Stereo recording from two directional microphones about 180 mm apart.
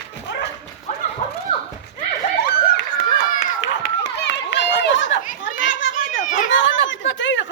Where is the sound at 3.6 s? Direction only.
85° left.